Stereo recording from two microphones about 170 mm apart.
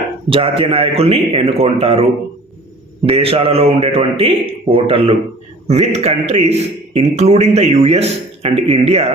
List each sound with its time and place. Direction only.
0.3 s a man's voice: 30° right (ahead or behind)
3.1 s a man's voice: 35° right (ahead or behind)